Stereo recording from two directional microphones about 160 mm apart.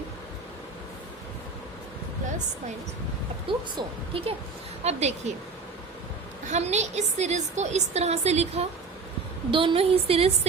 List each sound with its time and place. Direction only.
3.8 s a woman's voice: 35° right (ahead or behind)
6.4 s a woman's voice: 45° right (ahead or behind)